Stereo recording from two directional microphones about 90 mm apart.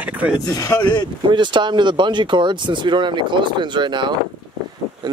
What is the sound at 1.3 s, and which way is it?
Speech, 60° right (ahead or behind).